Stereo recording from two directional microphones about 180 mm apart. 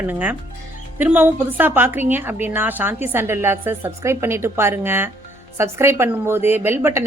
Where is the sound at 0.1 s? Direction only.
10° right (ahead or behind).